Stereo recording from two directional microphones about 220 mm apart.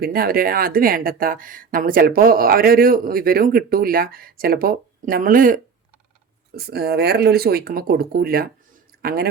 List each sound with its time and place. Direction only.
0.0 s speech: 45° right (ahead or behind)
6.6 s speech: 45° right (ahead or behind)
9.0 s a sound: 45° right (ahead or behind)